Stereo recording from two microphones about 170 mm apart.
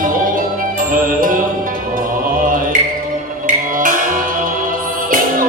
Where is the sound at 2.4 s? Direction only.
55° right (ahead or behind).